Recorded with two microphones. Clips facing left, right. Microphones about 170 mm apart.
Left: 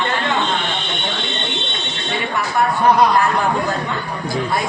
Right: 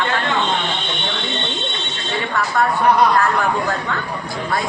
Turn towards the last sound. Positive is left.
turn(degrees=25)  # may be behind; listen again after turning